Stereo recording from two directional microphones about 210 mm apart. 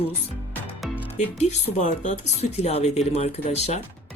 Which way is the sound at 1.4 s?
35° left (ahead or behind).